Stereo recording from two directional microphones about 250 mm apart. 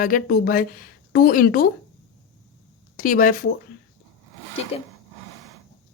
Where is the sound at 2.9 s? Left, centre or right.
Left.